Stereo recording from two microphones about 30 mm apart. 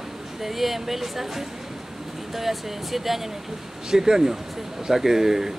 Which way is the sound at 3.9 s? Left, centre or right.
Centre.